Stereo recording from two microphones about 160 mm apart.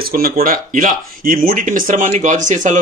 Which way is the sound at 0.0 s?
65° right (ahead or behind).